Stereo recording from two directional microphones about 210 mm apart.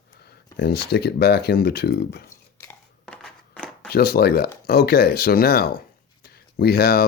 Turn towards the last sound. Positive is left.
turn(degrees=45)  # may be behind; listen again after turning